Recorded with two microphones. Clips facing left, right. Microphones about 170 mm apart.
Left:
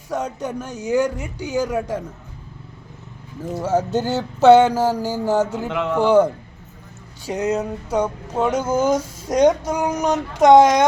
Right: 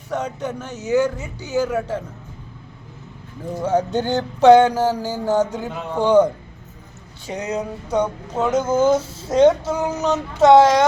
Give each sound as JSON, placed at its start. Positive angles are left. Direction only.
{"t": 0.1, "sound": "speech", "side_deg": 10}
{"t": 3.5, "sound": "speech", "side_deg": 5}
{"t": 5.6, "sound": "a man's voice", "side_deg": 90}
{"t": 6.0, "sound": "speech", "side_deg": 10}